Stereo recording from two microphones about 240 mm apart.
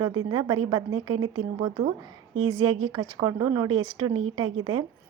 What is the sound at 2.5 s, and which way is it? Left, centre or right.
Speech, centre.